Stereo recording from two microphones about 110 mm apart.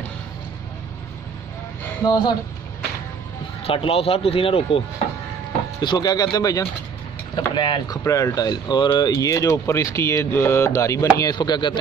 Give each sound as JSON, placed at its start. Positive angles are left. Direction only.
{"t": 2.0, "sound": "speech", "side_deg": 45}
{"t": 3.6, "sound": "speech", "side_deg": 60}
{"t": 5.8, "sound": "speech", "side_deg": 40}
{"t": 7.3, "sound": "speech", "side_deg": 45}
{"t": 8.0, "sound": "speech", "side_deg": 25}
{"t": 9.1, "sound": "speech", "side_deg": 30}